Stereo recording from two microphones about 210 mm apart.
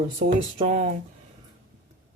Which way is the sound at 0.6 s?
30° right (ahead or behind).